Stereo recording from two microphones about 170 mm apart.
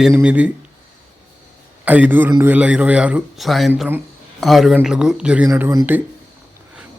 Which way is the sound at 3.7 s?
10° right (ahead or behind).